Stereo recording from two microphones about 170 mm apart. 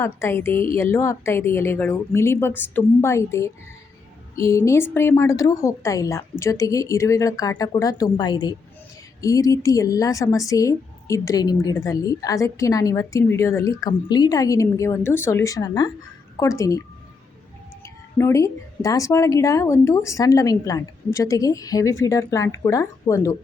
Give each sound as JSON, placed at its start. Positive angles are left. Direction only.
{"t": 0.0, "sound": "a woman's voice", "side_deg": 15}
{"t": 17.8, "sound": "speech", "side_deg": 15}